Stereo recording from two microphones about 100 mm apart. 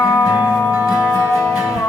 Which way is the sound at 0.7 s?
10° right (ahead or behind).